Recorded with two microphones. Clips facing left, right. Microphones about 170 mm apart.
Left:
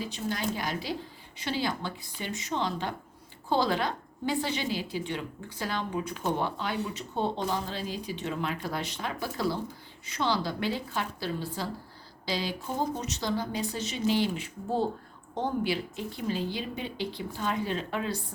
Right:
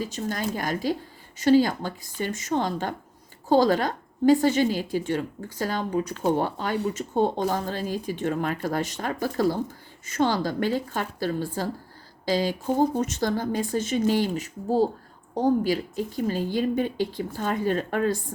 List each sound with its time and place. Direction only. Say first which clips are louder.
0.0 s speech: right 3 dB; 45° right (ahead or behind)